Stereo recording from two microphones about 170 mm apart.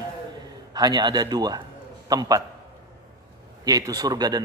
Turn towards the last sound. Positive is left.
turn(degrees=-25)  # may be behind; listen again after turning